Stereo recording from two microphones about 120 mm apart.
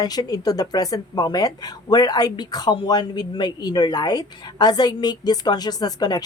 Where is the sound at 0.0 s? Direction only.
35° left (ahead or behind).